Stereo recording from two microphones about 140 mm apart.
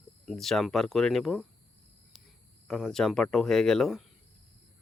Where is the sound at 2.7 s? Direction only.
5° left (ahead or behind).